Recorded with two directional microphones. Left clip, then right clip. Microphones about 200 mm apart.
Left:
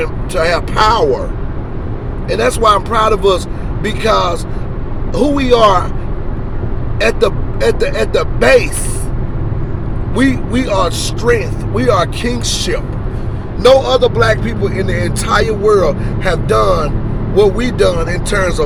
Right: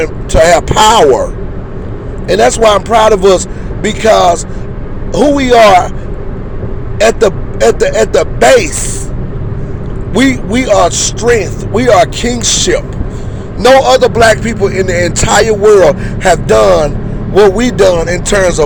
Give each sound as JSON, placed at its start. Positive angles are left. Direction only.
{"t": 0.0, "sound": "a man's voice", "side_deg": -30}
{"t": 7.0, "sound": "a man's voice", "side_deg": -30}
{"t": 10.2, "sound": "a man's voice", "side_deg": -30}